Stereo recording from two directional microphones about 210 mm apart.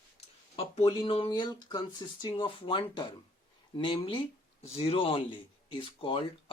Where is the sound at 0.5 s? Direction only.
25° left (ahead or behind).